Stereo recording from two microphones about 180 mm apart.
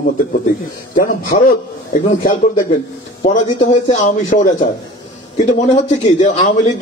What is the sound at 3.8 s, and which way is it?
A man's voice, 45° left (ahead or behind).